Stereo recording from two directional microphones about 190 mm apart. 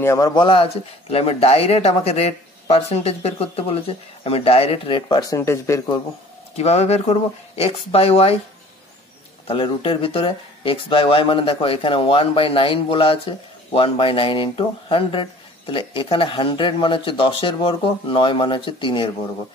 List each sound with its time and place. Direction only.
0.0 s speech: 15° left (ahead or behind)
6.5 s speech: 35° left (ahead or behind)
9.5 s speech: 30° left (ahead or behind)